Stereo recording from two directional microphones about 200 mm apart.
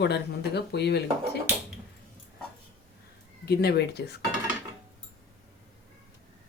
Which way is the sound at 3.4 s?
50° left (ahead or behind).